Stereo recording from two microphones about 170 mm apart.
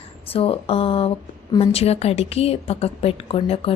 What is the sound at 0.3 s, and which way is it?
A woman's voice, 35° left (ahead or behind).